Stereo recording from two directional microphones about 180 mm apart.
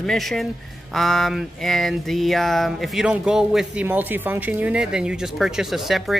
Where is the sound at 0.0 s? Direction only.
Centre (ahead or behind).